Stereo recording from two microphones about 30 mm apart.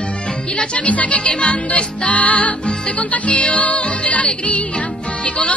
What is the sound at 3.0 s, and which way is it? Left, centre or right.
Music, left.